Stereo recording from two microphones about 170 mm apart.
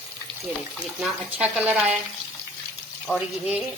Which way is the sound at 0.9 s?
5° right (ahead or behind).